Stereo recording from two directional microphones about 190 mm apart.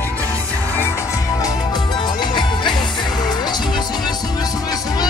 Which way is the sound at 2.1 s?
25° left (ahead or behind).